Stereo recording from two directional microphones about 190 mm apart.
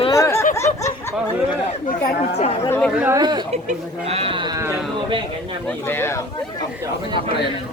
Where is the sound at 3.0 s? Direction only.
10° right (ahead or behind).